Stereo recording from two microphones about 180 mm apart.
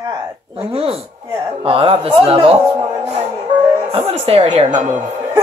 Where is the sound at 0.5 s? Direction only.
30° right (ahead or behind).